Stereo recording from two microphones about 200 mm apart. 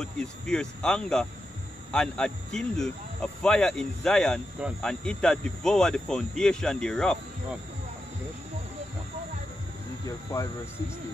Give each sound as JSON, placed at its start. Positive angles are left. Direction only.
{"t": 0.0, "sound": "speech", "side_deg": 5}
{"t": 10.0, "sound": "speech", "side_deg": 15}